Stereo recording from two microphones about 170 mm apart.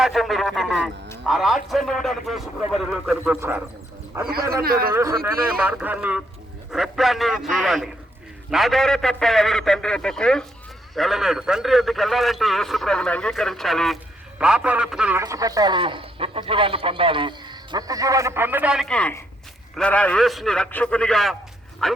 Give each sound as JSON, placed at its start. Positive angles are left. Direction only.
{"t": 0.0, "sound": "a man's voice", "side_deg": 0}
{"t": 4.1, "sound": "a man's voice", "side_deg": -15}
{"t": 4.6, "sound": "speech", "side_deg": -60}
{"t": 4.9, "sound": "a man's voice", "side_deg": -15}
{"t": 15.2, "sound": "a man's voice", "side_deg": -20}